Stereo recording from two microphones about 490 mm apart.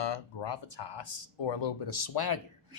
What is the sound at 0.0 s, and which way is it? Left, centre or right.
A man's voice, left.